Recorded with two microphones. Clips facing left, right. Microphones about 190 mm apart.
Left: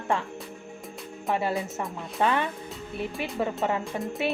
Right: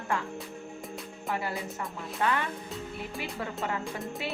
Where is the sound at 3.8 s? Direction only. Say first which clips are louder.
Left 4 dB; centre (ahead or behind).